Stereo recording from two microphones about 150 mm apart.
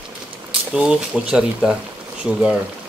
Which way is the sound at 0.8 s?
5° right (ahead or behind).